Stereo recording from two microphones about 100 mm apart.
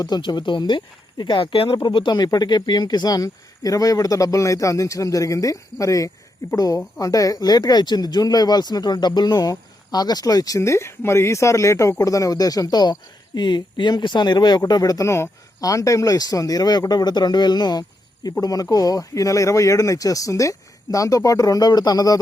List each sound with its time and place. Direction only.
0.0 s speech: 45° left (ahead or behind)
2.1 s speech: 45° left (ahead or behind)